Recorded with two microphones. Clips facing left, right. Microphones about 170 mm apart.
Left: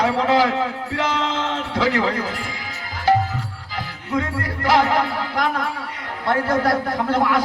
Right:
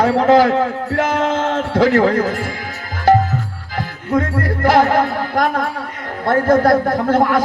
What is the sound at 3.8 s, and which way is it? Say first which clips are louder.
A man's voice: right 6 dB; 50° right (ahead or behind).